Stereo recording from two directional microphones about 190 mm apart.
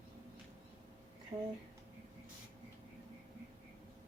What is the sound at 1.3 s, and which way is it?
Speech, 30° right (ahead or behind).